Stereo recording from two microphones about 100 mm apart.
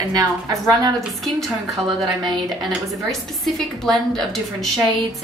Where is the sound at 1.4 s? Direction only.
Centre (ahead or behind).